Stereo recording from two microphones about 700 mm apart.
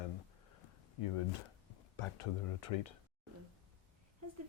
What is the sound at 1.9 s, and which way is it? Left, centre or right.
Speech, left.